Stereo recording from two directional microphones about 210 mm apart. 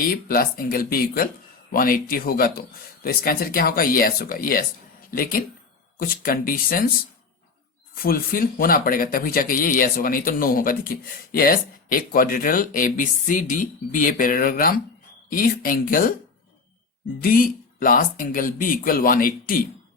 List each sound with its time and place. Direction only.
0.0 s speech: 45° left (ahead or behind)
8.0 s speech: 45° left (ahead or behind)
17.2 s speech: 40° left (ahead or behind)